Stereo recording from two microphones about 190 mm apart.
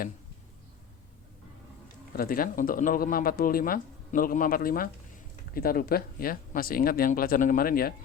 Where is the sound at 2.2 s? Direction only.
50° left (ahead or behind).